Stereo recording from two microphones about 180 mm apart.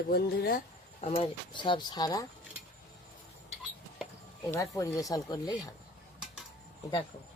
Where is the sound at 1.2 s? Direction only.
25° left (ahead or behind).